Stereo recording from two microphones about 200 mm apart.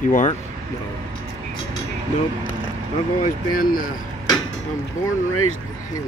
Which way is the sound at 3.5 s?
45° left (ahead or behind).